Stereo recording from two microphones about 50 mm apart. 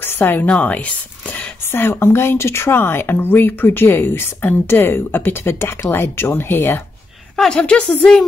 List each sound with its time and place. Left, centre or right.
0.0 s a sound: left
0.5 s speech: left
1.7 s speech: left
7.3 s a woman's voice: centre